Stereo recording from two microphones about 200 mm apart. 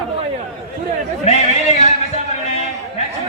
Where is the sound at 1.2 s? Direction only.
30° left (ahead or behind).